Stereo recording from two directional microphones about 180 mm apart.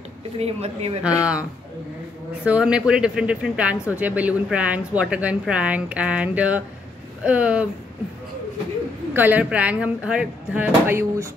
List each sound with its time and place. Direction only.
0.4 s speech: 35° right (ahead or behind)
1.0 s speech: 5° right (ahead or behind)
2.4 s a woman's voice: 5° right (ahead or behind)
9.1 s speech: 10° right (ahead or behind)